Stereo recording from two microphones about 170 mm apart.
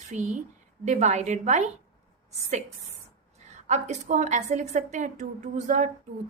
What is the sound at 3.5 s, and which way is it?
A woman's voice, 40° right (ahead or behind).